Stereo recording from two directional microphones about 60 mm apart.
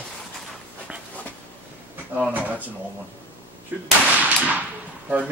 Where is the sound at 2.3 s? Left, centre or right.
Right.